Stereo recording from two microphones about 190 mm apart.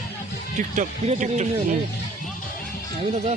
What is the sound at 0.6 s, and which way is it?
Speech, 40° right (ahead or behind).